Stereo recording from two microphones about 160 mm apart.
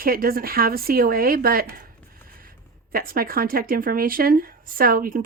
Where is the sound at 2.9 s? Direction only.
65° right (ahead or behind).